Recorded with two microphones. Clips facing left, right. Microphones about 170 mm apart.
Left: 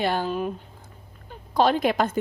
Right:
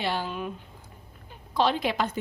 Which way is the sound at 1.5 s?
45° left (ahead or behind).